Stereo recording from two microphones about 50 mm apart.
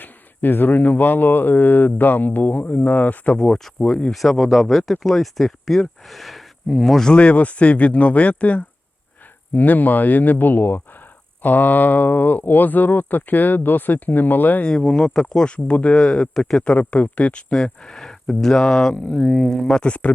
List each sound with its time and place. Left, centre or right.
0.0 s speech: left
3.2 s speech: centre
4.1 s speech: centre
7.1 s speech: left
14.6 s speech: centre
15.4 s speech: left
16.3 s speech: centre
16.6 s speech: left
17.5 s speech: centre
19.8 s speech: left